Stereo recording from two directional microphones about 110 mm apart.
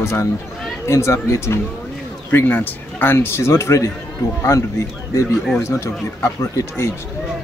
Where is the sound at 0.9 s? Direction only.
25° left (ahead or behind).